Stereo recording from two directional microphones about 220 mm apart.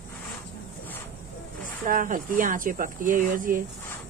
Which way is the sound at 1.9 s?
40° right (ahead or behind).